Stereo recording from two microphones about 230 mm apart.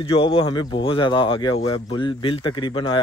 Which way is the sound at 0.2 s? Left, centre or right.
Left.